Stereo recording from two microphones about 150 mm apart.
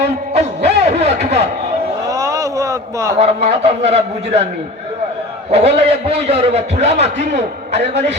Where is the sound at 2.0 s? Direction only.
20° right (ahead or behind).